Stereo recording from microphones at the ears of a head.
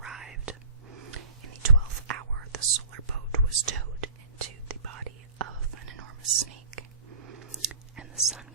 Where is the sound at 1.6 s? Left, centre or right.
Right.